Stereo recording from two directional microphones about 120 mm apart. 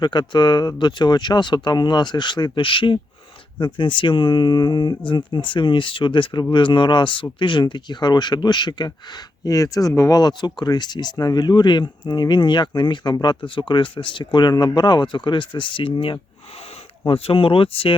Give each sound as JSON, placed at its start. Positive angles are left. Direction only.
{"t": 0.0, "sound": "speech", "side_deg": 40}